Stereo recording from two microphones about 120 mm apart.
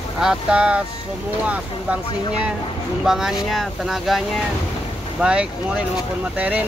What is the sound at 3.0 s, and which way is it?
Speech, 5° right (ahead or behind).